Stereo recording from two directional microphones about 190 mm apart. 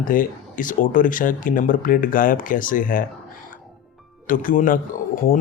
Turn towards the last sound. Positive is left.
turn(degrees=45)  # may be behind; listen again after turning